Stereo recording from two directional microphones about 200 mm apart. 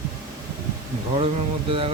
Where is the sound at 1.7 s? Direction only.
25° right (ahead or behind).